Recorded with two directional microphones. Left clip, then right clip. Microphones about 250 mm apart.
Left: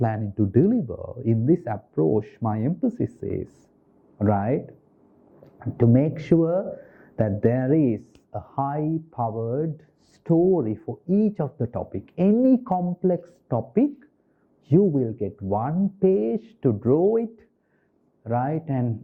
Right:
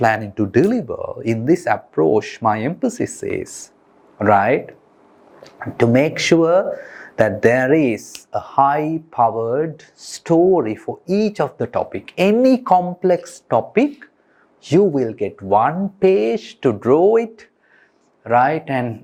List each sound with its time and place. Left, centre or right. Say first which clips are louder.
0.0 s speech: right 9 dB; centre